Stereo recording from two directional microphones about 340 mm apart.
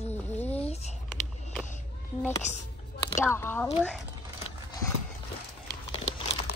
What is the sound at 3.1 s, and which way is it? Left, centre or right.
Speech, centre.